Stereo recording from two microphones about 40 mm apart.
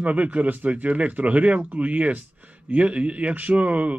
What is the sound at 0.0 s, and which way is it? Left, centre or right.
A man's voice, right.